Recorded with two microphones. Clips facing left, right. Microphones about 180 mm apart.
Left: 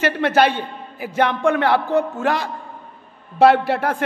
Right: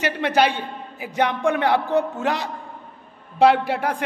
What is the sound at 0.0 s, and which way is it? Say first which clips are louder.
A man's voice: left 3 dB; 15° right (ahead or behind).